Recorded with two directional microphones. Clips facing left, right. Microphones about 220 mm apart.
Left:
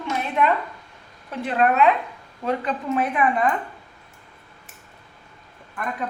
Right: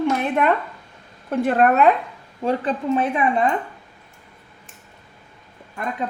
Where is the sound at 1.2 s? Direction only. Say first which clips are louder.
Right 4 dB; 50° right (ahead or behind).